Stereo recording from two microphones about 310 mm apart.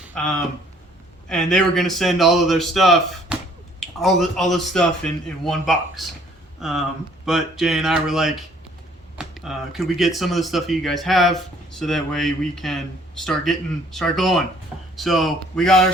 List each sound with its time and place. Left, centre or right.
0.1 s a man's voice: centre